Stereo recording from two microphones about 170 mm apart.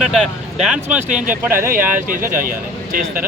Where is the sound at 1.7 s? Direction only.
50° right (ahead or behind).